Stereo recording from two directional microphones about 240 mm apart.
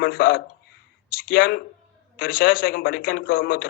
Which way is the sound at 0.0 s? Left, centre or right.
Left.